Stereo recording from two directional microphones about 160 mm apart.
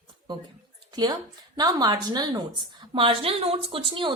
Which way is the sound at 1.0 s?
25° right (ahead or behind).